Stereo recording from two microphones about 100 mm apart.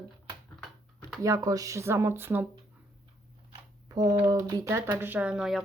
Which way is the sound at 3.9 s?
40° right (ahead or behind).